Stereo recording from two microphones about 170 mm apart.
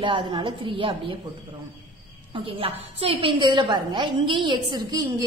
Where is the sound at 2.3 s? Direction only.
30° right (ahead or behind).